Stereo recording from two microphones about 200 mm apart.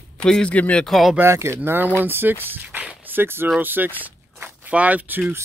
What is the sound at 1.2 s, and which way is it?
Speech, 15° right (ahead or behind).